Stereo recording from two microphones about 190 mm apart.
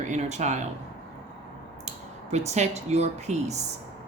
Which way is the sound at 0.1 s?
40° right (ahead or behind).